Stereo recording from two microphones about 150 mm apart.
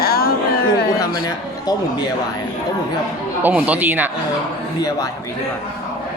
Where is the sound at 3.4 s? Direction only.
10° right (ahead or behind).